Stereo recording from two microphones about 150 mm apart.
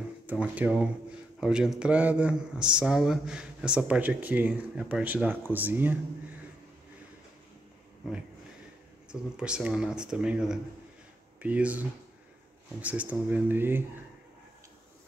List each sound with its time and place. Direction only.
0.3 s speech: 10° right (ahead or behind)
9.1 s speech: 5° right (ahead or behind)
12.8 s speech: 10° right (ahead or behind)